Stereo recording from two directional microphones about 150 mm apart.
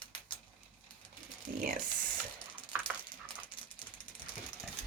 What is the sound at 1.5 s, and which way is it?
Speech, 65° right (ahead or behind).